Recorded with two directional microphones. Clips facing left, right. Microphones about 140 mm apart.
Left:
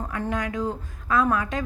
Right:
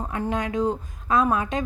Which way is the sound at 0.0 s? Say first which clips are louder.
Right 1 dB; 20° right (ahead or behind).